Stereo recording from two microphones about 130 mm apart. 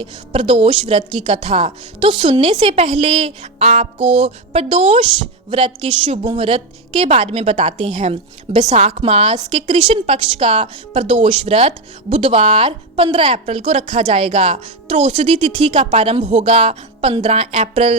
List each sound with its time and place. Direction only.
0.0 s a woman's voice: 45° right (ahead or behind)
9.4 s a woman's voice: 40° right (ahead or behind)